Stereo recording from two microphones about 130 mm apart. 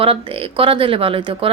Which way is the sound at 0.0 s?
45° right (ahead or behind).